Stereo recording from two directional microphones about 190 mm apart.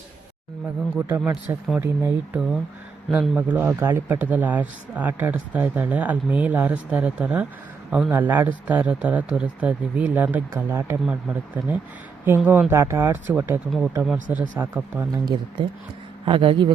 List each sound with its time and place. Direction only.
0.9 s a man's voice: 10° right (ahead or behind)
16.2 s speech: 25° right (ahead or behind)